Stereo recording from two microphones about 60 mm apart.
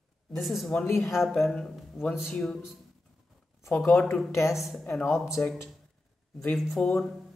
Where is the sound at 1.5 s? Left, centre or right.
Centre.